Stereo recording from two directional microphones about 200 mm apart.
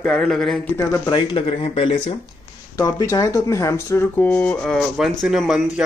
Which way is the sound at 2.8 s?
15° left (ahead or behind).